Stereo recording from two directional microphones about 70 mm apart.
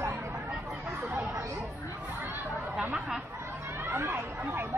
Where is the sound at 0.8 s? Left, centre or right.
Right.